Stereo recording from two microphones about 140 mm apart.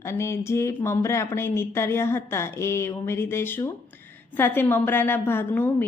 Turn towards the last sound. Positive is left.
turn(degrees=15)  # may be behind; listen again after turning